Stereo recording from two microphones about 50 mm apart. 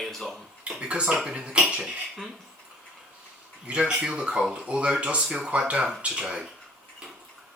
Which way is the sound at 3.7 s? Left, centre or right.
Right.